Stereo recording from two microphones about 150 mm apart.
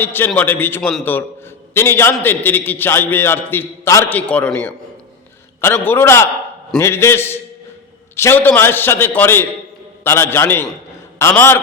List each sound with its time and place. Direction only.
0.0 s a man's voice: 15° left (ahead or behind)